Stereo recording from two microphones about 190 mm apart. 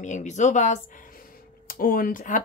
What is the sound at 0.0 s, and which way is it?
Speech, 40° left (ahead or behind).